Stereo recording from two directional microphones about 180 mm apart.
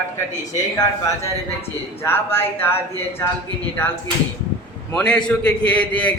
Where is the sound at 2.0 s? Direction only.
10° left (ahead or behind).